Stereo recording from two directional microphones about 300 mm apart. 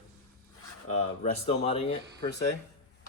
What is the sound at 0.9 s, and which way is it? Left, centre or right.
A man's voice, left.